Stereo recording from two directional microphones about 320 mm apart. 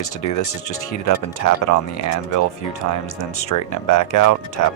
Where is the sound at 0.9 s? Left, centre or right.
Left.